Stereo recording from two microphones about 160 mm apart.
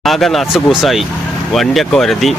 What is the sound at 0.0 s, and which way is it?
Speech, centre (ahead or behind).